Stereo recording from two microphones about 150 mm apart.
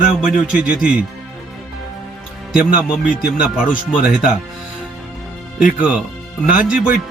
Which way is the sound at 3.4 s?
5° right (ahead or behind).